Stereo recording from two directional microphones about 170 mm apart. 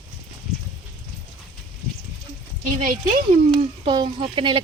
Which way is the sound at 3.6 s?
30° right (ahead or behind).